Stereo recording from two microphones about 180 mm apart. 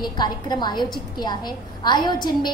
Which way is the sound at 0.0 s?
25° left (ahead or behind).